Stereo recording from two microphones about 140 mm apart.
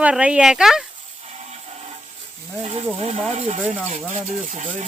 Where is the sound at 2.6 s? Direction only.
45° right (ahead or behind).